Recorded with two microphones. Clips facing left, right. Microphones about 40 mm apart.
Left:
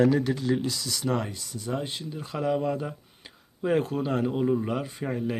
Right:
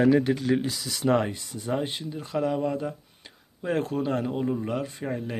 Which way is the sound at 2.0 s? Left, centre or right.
Centre.